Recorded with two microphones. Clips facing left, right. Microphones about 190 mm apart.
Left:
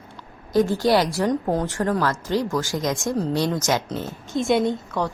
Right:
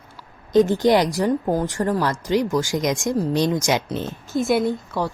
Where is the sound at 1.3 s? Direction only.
5° right (ahead or behind).